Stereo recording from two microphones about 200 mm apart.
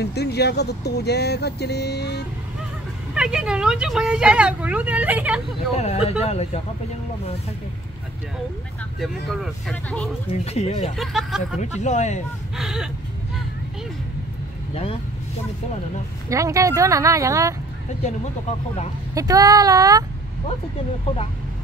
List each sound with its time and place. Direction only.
0.0 s speech: 55° left (ahead or behind)
3.2 s speech: 5° right (ahead or behind)
5.8 s speech: 30° left (ahead or behind)
9.0 s speech: centre (ahead or behind)
10.4 s speech: 30° left (ahead or behind)
11.0 s speech: centre (ahead or behind)
11.8 s speech: 35° left (ahead or behind)
12.5 s speech: 5° right (ahead or behind)
16.3 s speech: 15° right (ahead or behind)
19.1 s speech: 15° right (ahead or behind)